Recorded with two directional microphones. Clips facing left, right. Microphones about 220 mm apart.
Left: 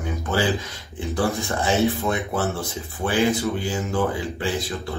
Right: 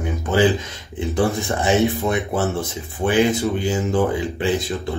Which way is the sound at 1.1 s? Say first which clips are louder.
Right 3 dB; 20° right (ahead or behind).